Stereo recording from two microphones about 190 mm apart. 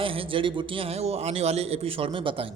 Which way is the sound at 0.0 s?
30° right (ahead or behind).